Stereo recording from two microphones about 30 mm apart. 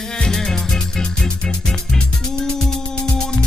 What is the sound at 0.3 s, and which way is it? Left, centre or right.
Music, centre.